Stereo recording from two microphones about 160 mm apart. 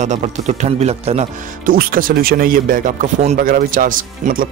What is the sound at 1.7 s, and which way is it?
Speech, 65° right (ahead or behind).